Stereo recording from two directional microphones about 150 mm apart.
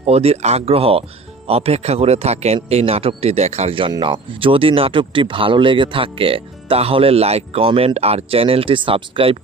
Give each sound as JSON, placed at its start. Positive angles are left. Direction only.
{"t": 0.0, "sound": "speech", "side_deg": -45}